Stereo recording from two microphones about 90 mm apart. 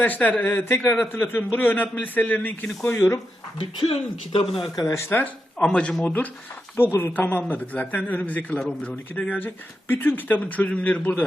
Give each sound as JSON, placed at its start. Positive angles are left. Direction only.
{"t": 0.0, "sound": "a man's voice", "side_deg": 20}
{"t": 2.9, "sound": "speech", "side_deg": 35}
{"t": 3.6, "sound": "speech", "side_deg": 75}
{"t": 4.9, "sound": "speech", "side_deg": 30}
{"t": 5.1, "sound": "speech", "side_deg": 15}
{"t": 6.7, "sound": "a man's voice", "side_deg": 25}